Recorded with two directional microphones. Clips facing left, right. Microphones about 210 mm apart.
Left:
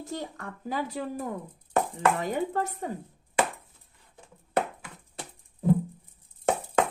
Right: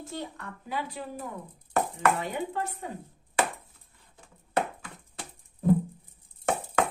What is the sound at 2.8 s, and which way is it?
Speech, 45° left (ahead or behind).